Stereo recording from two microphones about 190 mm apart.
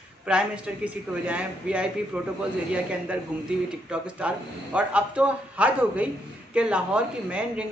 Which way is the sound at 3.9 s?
5° right (ahead or behind).